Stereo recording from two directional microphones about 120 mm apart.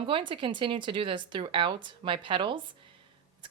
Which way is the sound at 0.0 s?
45° right (ahead or behind).